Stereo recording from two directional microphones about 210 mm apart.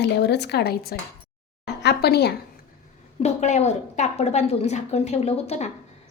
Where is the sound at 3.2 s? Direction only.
35° left (ahead or behind).